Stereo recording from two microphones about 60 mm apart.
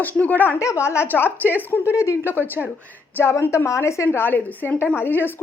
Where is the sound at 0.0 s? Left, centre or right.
Left.